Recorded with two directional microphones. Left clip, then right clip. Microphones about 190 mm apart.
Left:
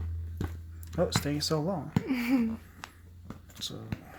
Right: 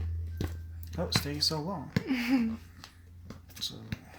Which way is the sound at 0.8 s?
45° left (ahead or behind).